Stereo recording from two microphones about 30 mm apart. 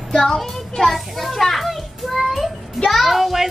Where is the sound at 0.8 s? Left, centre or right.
Centre.